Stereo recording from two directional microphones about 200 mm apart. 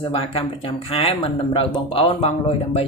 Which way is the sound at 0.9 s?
30° left (ahead or behind).